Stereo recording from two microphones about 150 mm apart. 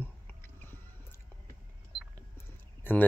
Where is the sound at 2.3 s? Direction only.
15° left (ahead or behind).